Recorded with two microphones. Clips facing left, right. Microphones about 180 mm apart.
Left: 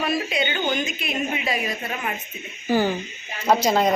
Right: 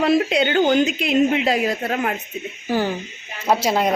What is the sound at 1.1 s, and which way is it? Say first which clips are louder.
A woman's voice: right 8 dB; 85° right.